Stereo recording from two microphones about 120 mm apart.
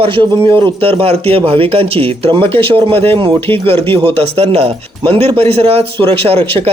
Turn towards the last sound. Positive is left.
turn(degrees=-55)  # may be behind; listen again after turning